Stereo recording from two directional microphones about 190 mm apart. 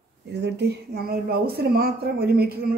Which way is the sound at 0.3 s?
60° right (ahead or behind).